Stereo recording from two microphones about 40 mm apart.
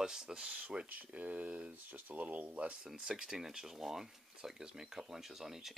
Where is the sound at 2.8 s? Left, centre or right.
Centre.